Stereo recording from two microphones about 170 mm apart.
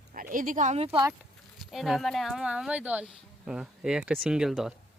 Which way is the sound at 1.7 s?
Centre (ahead or behind).